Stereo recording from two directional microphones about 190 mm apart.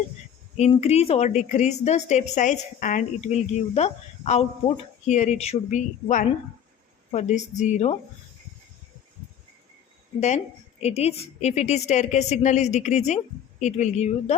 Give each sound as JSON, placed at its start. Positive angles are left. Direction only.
{"t": 0.8, "sound": "a woman's voice", "side_deg": 35}
{"t": 10.2, "sound": "a woman's voice", "side_deg": 35}